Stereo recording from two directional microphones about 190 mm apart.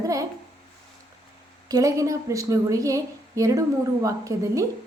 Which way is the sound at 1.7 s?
20° right (ahead or behind).